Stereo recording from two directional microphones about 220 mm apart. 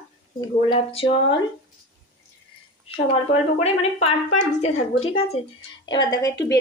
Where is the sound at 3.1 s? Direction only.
30° left (ahead or behind).